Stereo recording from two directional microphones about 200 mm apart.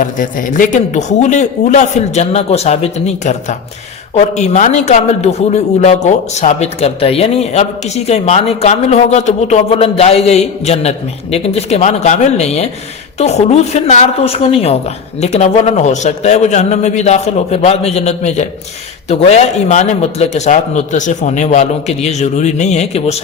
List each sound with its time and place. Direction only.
0.0 s a man's voice: 40° left (ahead or behind)